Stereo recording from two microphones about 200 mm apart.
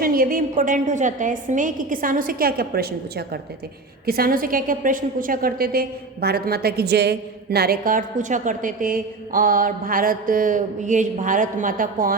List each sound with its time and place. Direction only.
0.0 s a woman's voice: 45° right (ahead or behind)